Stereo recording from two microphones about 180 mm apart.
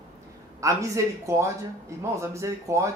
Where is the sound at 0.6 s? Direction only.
15° right (ahead or behind).